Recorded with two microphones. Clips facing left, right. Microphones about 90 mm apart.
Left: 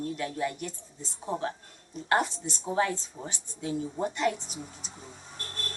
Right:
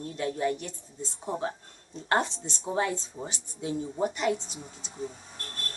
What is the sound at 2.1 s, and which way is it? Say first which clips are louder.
Speech: even; 25° right (ahead or behind).